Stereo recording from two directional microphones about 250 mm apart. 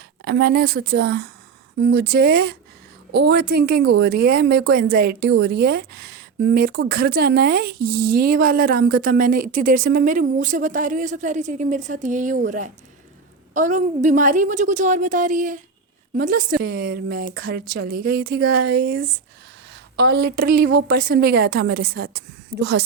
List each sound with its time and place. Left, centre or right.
0.3 s a woman's voice: right